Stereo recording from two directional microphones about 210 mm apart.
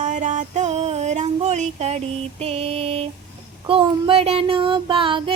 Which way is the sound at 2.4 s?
30° right (ahead or behind).